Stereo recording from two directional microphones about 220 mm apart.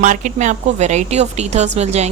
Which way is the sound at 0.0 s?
35° right (ahead or behind).